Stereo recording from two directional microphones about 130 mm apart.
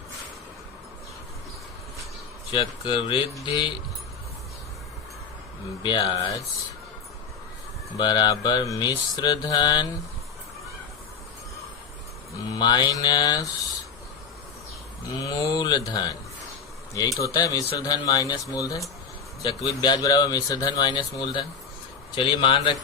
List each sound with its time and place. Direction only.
2.5 s speech: 40° left (ahead or behind)
3.4 s mantra: 40° left (ahead or behind)
5.8 s mantra: 35° left (ahead or behind)
7.9 s mantra: 35° left (ahead or behind)
12.5 s mantra: 35° left (ahead or behind)
15.1 s speech: 25° left (ahead or behind)
22.1 s mantra: 40° left (ahead or behind)